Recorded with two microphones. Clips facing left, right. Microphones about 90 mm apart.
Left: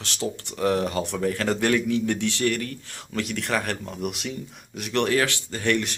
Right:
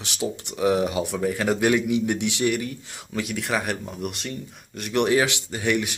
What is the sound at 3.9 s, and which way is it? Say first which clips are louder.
Speech: left 1 dB; centre (ahead or behind).